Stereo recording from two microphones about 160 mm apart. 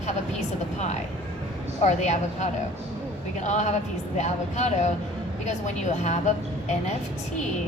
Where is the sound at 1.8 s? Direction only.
45° left (ahead or behind).